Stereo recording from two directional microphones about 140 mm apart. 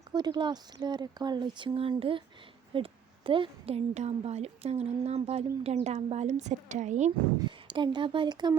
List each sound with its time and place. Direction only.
0.1 s a woman's voice: 30° right (ahead or behind); by 7.1 s 60° right (ahead or behind)
7.7 s speech: 35° right (ahead or behind)